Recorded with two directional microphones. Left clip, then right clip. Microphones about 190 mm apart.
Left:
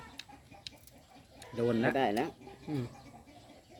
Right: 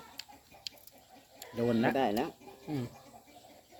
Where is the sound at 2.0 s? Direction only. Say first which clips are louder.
Even; 20° left (ahead or behind).